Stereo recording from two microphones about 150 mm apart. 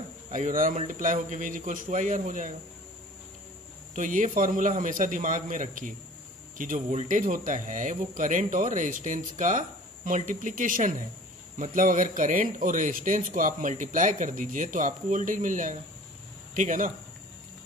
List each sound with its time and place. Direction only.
0.3 s speech: 60° right (ahead or behind)
3.9 s speech: 60° right (ahead or behind)